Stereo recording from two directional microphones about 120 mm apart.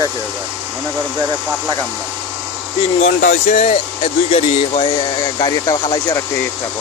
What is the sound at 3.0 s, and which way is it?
Speech, 80° left.